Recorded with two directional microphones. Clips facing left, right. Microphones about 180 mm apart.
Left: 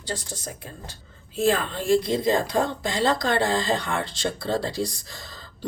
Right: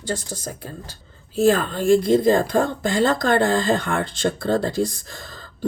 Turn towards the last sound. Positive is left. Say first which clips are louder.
# right 8 dB
turn(degrees=-50)  # may be behind; listen again after turning